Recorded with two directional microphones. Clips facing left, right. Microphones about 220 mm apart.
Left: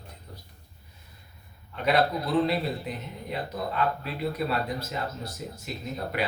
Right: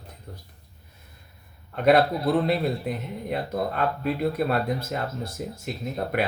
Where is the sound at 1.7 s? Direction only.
50° right (ahead or behind).